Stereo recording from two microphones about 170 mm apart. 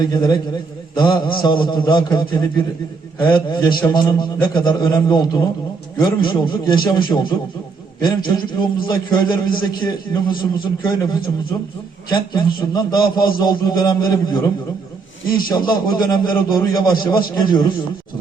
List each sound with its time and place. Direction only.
0.0 s a man's voice: 25° left (ahead or behind)
3.2 s a man's voice: 25° left (ahead or behind)